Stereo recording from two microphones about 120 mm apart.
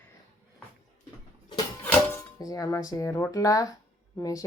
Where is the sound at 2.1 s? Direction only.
30° left (ahead or behind).